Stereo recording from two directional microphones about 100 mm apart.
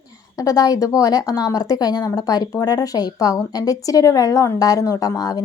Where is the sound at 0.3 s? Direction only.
35° left (ahead or behind).